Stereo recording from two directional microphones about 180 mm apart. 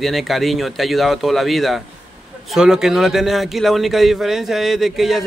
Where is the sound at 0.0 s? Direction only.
Centre (ahead or behind).